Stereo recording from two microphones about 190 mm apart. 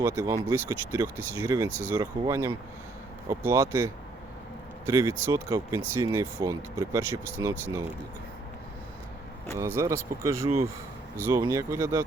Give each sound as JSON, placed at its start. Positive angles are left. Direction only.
{"t": 0.0, "sound": "speech", "side_deg": -15}
{"t": 9.6, "sound": "speech", "side_deg": -15}